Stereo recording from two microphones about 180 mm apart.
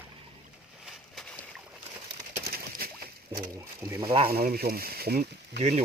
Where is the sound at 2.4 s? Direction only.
55° right (ahead or behind).